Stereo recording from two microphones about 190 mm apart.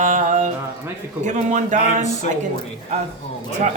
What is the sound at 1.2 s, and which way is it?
Speech, 40° right (ahead or behind).